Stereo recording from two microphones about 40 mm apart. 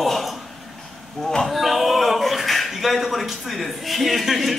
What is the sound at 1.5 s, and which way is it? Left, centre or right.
Speech, centre.